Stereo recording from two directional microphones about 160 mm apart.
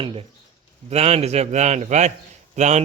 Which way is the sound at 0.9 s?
40° right (ahead or behind).